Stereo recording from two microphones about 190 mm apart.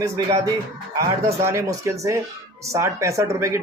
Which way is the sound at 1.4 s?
15° right (ahead or behind).